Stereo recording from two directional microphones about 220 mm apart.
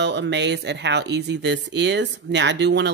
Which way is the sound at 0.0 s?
50° right (ahead or behind).